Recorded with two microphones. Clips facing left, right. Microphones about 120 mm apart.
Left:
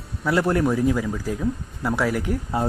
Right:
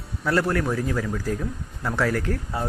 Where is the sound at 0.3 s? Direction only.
15° left (ahead or behind).